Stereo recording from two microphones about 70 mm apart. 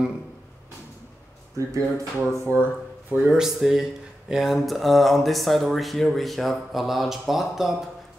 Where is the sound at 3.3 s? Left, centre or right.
Centre.